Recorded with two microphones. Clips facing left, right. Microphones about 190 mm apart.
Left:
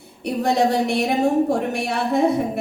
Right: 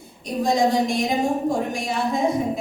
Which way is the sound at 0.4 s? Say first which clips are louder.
Even; 65° left (ahead or behind).